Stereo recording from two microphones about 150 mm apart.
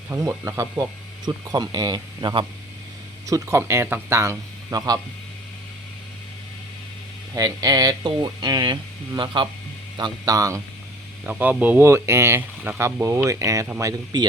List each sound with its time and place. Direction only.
0.1 s speech: 15° right (ahead or behind)
7.3 s speech: 25° right (ahead or behind)
11.2 s speech: 10° right (ahead or behind); by 14.3 s 25° right (ahead or behind)